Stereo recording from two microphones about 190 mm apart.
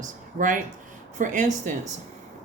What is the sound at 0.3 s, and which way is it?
Speech, 45° right (ahead or behind).